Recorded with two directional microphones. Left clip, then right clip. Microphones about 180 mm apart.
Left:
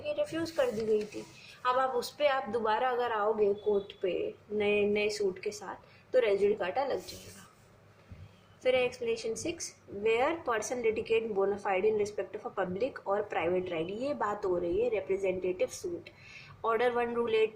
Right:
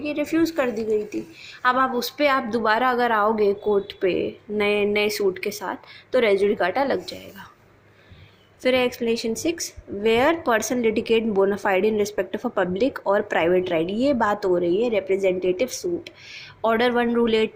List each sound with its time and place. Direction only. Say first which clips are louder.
0.0 s speech: right 10 dB; 55° right (ahead or behind)
8.6 s a woman's voice: right 8 dB; 45° right (ahead or behind)